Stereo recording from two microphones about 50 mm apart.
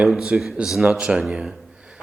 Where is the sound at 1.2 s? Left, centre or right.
Centre.